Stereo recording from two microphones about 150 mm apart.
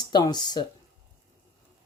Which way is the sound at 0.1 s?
30° left (ahead or behind).